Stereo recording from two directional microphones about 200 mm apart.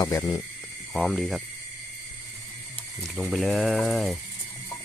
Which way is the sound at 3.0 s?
Centre (ahead or behind).